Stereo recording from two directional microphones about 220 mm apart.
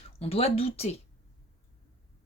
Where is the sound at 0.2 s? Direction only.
25° left (ahead or behind).